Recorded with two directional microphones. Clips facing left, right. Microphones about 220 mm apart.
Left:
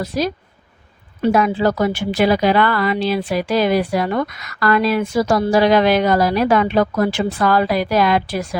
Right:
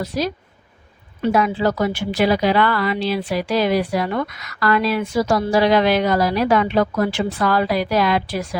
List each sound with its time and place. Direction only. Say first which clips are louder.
0.0 s a woman's voice: left 2 dB; 45° left (ahead or behind)